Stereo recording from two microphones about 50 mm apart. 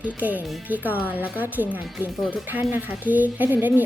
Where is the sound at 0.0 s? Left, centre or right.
Right.